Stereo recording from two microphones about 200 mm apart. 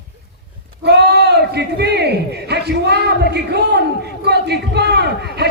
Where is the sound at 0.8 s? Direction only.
55° right (ahead or behind).